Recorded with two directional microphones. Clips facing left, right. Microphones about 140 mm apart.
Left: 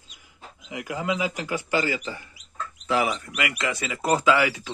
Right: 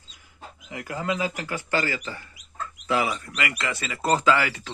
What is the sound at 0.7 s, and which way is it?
Speech, 15° left (ahead or behind).